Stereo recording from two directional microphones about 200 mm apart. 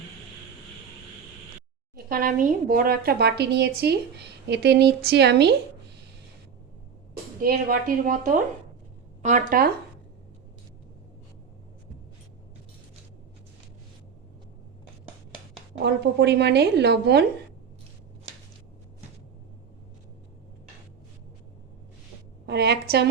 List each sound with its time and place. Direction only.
2.0 s a woman's voice: 45° right (ahead or behind)
7.4 s a woman's voice: 45° right (ahead or behind)
15.8 s speech: 60° right (ahead or behind)
22.4 s speech: 55° right (ahead or behind)